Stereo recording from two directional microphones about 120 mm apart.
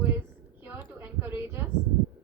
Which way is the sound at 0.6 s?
15° right (ahead or behind).